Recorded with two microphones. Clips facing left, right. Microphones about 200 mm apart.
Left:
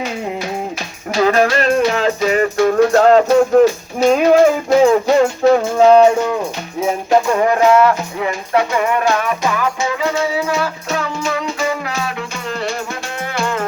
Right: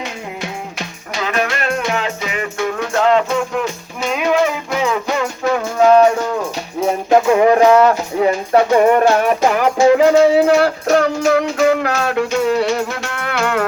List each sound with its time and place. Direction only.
1.2 s music: 35° left (ahead or behind)
5.2 s music: 30° left (ahead or behind)
7.1 s music: 15° right (ahead or behind)
8.2 s music: 35° right (ahead or behind); by 13.7 s 65° right (ahead or behind)